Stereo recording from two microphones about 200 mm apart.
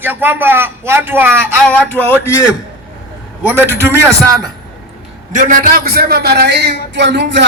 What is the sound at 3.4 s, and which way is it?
A man's voice, 10° right (ahead or behind).